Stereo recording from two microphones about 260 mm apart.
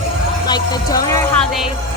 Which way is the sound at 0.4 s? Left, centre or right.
Centre.